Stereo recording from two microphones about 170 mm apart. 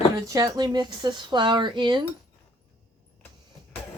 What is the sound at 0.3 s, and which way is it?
Speech, 25° right (ahead or behind).